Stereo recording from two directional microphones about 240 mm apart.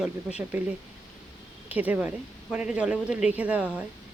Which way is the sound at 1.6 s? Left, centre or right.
Centre.